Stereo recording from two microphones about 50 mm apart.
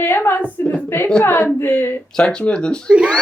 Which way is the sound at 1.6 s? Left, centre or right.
Left.